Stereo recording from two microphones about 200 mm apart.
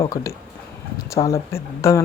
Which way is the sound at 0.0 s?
15° left (ahead or behind).